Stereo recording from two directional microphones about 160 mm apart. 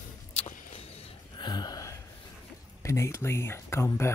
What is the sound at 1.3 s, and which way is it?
Gasp, 25° left (ahead or behind).